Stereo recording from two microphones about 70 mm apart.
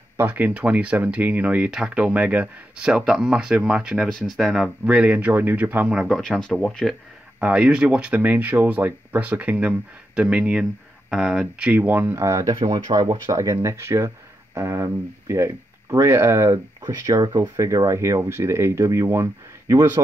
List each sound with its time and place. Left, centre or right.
0.2 s speech: right
1.7 s speech: centre
2.0 s speech: centre
4.8 s speech: centre
5.9 s speech: centre
6.5 s speech: centre
7.3 s speech: centre
11.6 s speech: right
12.3 s speech: right
16.8 s speech: right